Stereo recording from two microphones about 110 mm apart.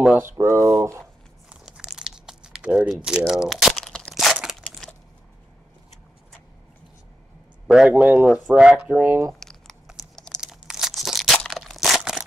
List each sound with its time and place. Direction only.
0.0 s speech: 15° right (ahead or behind)
1.5 s crumpling: 5° right (ahead or behind)
7.6 s speech: 5° right (ahead or behind)
7.9 s speech: 15° right (ahead or behind)
9.4 s crumpling: 5° left (ahead or behind)
10.4 s crushing: 5° right (ahead or behind)